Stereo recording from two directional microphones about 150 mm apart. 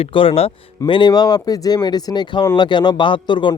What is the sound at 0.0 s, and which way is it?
A man's voice, 35° left (ahead or behind).